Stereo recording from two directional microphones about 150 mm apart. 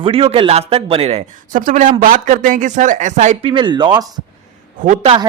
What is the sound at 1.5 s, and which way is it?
Speech, 60° right (ahead or behind).